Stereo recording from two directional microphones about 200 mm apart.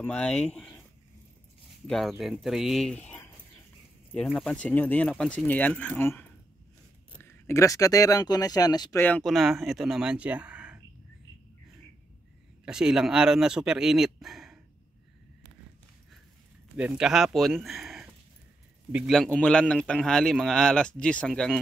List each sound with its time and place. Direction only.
0.0 s a man's voice: 5° left (ahead or behind)
1.9 s a man's voice: centre (ahead or behind); by 9.0 s 20° left (ahead or behind)
9.0 s a man's voice: 5° left (ahead or behind)
12.6 s a man's voice: 5° right (ahead or behind)
16.7 s a man's voice: 5° right (ahead or behind)